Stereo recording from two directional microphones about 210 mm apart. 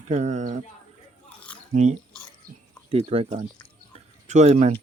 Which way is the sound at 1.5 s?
5° left (ahead or behind).